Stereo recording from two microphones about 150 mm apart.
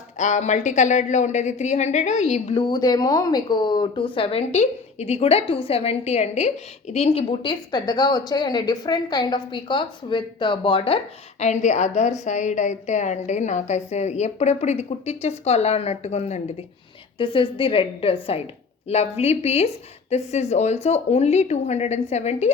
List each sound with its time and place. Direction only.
0.2 s speech: 55° left (ahead or behind)
2.6 s speech: 25° left (ahead or behind); by 16.4 s 45° left (ahead or behind)
17.2 s a woman's voice: 35° left (ahead or behind)